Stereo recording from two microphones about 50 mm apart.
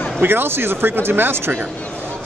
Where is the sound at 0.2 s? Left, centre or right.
Right.